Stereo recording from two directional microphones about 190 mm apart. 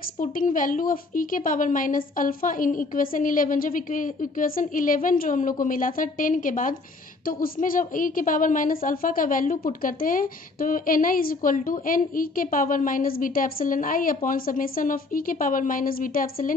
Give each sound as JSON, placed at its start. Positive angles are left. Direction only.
{"t": 0.2, "sound": "a woman's voice", "side_deg": 45}